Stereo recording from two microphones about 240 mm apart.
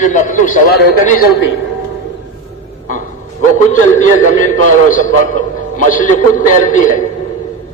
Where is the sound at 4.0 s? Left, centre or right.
Left.